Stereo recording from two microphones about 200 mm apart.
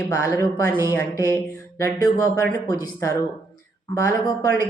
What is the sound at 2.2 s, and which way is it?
Speech, 10° left (ahead or behind).